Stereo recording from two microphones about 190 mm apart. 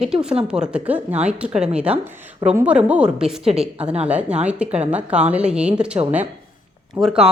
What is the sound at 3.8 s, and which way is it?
Speech, 35° right (ahead or behind).